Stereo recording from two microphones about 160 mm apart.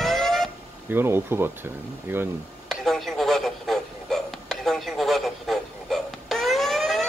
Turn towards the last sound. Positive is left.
turn(degrees=0)  # may be behind; listen again after turning